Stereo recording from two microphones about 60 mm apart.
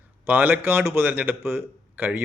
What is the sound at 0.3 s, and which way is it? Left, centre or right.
Speech, right.